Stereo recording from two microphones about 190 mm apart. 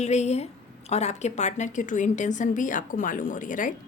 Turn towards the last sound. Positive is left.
turn(degrees=45)  # may be behind; listen again after turning